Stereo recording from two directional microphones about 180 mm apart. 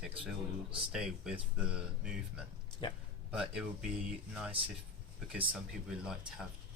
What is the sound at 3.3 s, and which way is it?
Speech, 5° right (ahead or behind).